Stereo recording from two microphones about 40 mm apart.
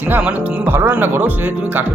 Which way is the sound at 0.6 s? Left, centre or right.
Right.